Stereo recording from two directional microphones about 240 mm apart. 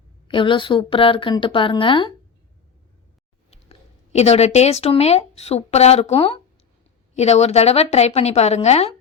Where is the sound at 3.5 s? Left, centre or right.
Left.